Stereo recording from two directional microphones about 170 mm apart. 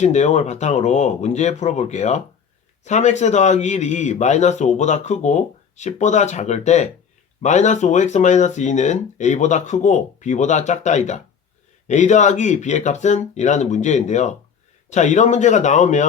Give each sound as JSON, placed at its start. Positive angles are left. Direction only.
{"t": 0.0, "sound": "speech", "side_deg": 40}